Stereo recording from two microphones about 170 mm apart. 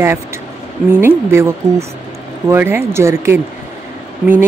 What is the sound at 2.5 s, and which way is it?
Speech, 15° right (ahead or behind).